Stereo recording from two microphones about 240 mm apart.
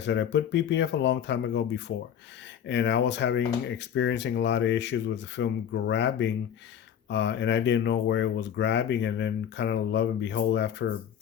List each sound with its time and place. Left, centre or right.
0.0 s speech: left